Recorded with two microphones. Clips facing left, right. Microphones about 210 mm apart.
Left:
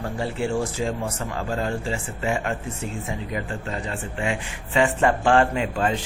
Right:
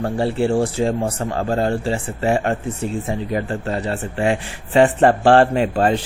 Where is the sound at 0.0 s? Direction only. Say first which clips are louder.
Right 7 dB; 30° right (ahead or behind).